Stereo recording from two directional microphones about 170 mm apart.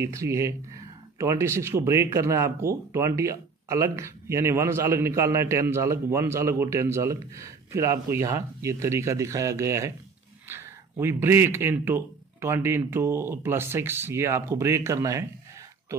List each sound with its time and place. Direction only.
0.0 s speech: 15° right (ahead or behind)